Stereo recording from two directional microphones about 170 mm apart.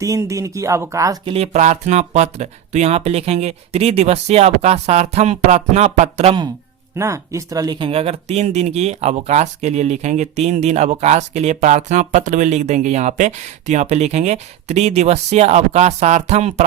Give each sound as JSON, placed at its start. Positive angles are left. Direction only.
{"t": 0.0, "sound": "speech", "side_deg": -20}
{"t": 1.2, "sound": "speech", "side_deg": -35}
{"t": 6.9, "sound": "speech", "side_deg": -15}